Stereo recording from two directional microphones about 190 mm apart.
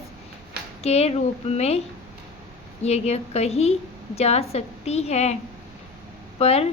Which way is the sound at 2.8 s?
35° left (ahead or behind).